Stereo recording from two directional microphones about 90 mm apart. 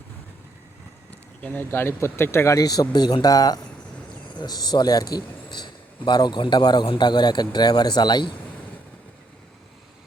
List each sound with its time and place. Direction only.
1.4 s speech: 20° left (ahead or behind)
2.6 s a man's voice: 45° left (ahead or behind)